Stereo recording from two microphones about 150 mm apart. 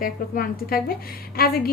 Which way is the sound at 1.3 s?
85° left.